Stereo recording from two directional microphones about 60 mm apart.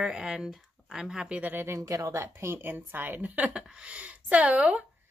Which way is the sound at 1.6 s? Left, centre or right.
Right.